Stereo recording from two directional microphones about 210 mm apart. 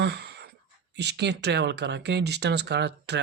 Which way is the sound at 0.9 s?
55° right (ahead or behind).